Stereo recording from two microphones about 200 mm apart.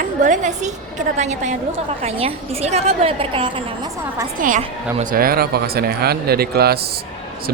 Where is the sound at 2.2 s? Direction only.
30° right (ahead or behind).